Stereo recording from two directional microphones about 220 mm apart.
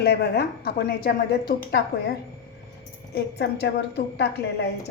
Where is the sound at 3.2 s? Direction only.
45° left (ahead or behind).